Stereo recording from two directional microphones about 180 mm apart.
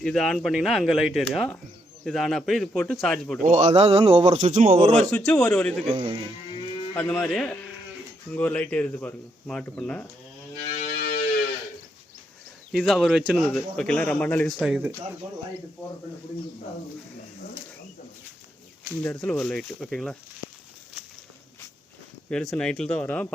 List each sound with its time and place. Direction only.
0.0 s speech: centre (ahead or behind)
3.4 s speech: 45° right (ahead or behind)
4.9 s speech: 5° left (ahead or behind)
6.9 s speech: 5° left (ahead or behind)
10.8 s music: 45° left (ahead or behind)
12.7 s speech: centre (ahead or behind)
19.0 s speech: 5° left (ahead or behind)
22.3 s speech: 5° left (ahead or behind)